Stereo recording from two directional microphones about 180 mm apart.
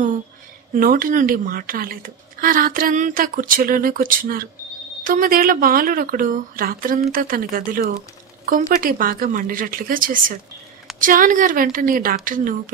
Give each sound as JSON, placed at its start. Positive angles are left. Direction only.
{"t": 0.7, "sound": "a woman's voice", "side_deg": -50}